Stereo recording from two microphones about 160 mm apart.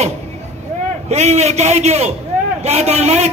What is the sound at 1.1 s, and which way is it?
A man's voice, 45° right (ahead or behind).